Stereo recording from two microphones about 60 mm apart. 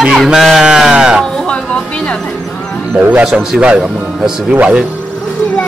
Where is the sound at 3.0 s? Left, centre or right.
Right; by 4.5 s centre.